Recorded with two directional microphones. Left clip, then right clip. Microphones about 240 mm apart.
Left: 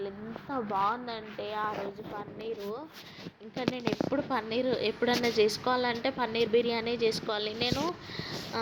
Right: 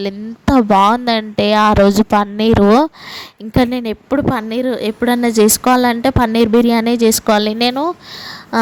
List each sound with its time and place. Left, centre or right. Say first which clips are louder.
0.5 s speech: right 19 dB; right